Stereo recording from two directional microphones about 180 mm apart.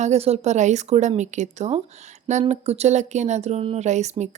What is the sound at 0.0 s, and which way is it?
Speech, 35° right (ahead or behind).